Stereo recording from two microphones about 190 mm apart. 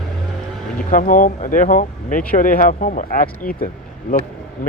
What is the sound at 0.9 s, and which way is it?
Speech, 45° left (ahead or behind).